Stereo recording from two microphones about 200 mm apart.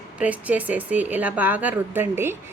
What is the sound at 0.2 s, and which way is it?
Speech, 5° right (ahead or behind).